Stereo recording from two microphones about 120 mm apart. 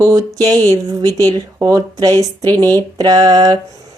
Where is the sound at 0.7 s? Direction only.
30° right (ahead or behind).